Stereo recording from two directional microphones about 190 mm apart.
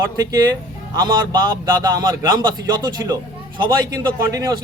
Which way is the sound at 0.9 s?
20° right (ahead or behind).